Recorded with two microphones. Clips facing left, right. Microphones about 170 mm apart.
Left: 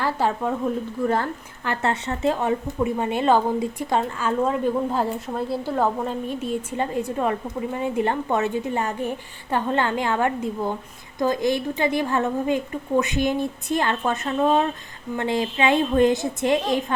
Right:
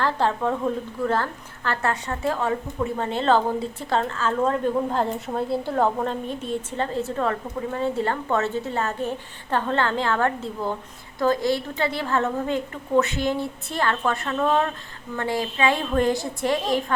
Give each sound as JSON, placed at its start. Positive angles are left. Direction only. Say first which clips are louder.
{"t": 0.0, "sound": "a woman's voice", "louder": "even", "side_deg": 10}